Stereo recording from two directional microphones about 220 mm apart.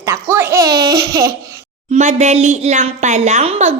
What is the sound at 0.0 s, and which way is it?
Speech, 10° right (ahead or behind).